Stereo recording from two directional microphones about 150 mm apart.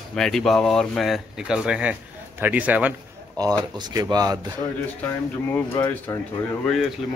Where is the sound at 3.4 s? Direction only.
25° right (ahead or behind).